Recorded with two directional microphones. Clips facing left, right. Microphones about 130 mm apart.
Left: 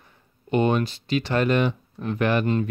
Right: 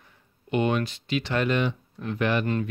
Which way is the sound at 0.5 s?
35° left (ahead or behind).